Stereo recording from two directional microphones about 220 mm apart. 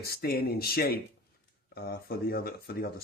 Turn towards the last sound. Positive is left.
turn(degrees=45)  # may be behind; listen again after turning